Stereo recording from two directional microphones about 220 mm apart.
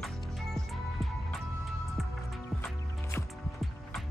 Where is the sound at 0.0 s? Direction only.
Centre (ahead or behind).